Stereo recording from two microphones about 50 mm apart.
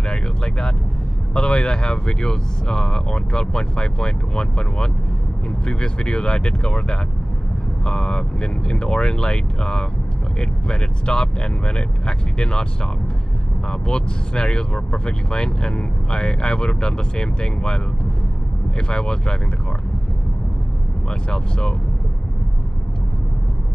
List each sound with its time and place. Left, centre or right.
0.1 s a sound: centre
1.3 s speech: centre
13.7 s speech: centre
18.8 s speech: centre
21.3 s speech: centre